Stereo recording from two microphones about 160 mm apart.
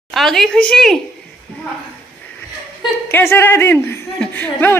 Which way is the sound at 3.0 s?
15° left (ahead or behind).